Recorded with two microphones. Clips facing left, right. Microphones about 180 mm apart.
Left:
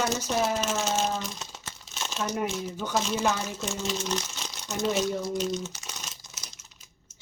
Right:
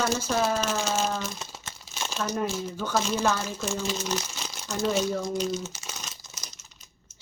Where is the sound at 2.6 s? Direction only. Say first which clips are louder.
Right 1 dB; 20° left (ahead or behind).